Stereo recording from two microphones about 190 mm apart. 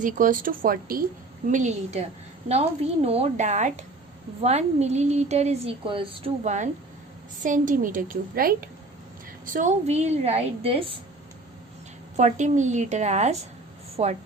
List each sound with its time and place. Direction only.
0.0 s a woman's voice: 45° right (ahead or behind)
12.1 s speech: 40° right (ahead or behind)